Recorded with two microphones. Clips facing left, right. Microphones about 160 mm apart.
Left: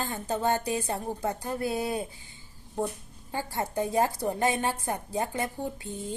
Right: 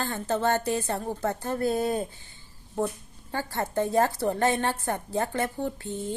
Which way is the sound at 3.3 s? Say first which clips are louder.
Right 2 dB; 15° left (ahead or behind).